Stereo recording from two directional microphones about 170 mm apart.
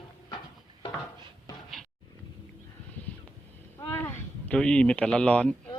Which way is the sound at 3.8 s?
15° left (ahead or behind).